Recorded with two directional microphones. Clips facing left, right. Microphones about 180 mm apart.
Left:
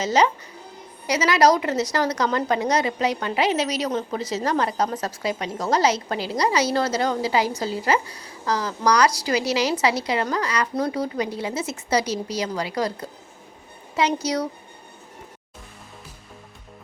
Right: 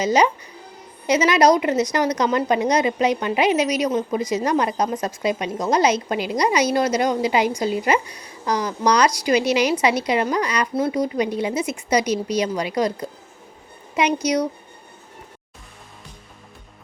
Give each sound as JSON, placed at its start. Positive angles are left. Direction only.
{"t": 0.0, "sound": "a woman's voice", "side_deg": -15}